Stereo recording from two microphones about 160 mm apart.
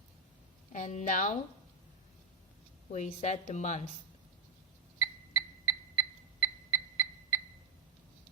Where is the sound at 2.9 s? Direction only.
50° left (ahead or behind).